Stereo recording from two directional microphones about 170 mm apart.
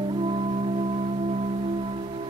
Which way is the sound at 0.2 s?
35° right (ahead or behind).